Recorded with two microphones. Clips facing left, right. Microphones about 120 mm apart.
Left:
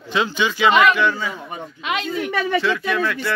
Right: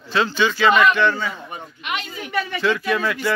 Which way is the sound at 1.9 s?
70° left (ahead or behind).